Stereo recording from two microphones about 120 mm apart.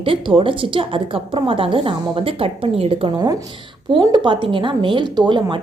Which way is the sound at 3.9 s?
40° right (ahead or behind).